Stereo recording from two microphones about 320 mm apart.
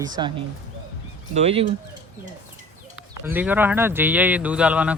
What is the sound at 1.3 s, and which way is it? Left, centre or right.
Speech, centre.